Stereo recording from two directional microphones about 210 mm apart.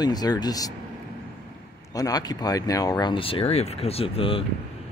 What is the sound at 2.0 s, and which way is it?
Speech, 15° left (ahead or behind).